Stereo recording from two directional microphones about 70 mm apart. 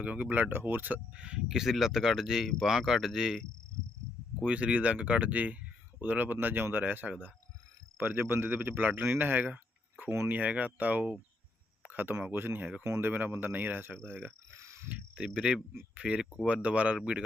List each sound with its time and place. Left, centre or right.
0.0 s speech: right; by 3.4 s centre
4.4 s speech: centre
12.8 s speech: right
13.1 s speech: right
14.5 s cricket: right
15.1 s speech: centre